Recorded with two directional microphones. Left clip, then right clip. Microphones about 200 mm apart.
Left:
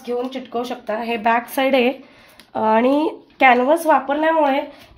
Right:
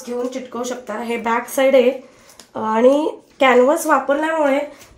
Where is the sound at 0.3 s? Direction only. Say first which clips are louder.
Even; 40° left (ahead or behind).